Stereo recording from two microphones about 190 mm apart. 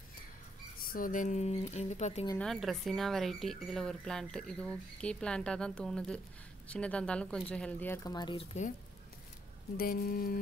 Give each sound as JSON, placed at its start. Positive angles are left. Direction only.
{"t": 0.7, "sound": "speech", "side_deg": 50}
{"t": 2.3, "sound": "speech", "side_deg": 0}
{"t": 9.8, "sound": "speech", "side_deg": 50}